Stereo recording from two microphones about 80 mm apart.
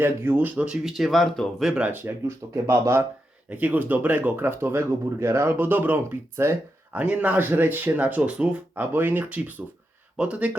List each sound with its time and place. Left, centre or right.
0.0 s speech: right
0.9 s speech: centre
1.7 s speech: centre
3.5 s speech: right
6.9 s speech: centre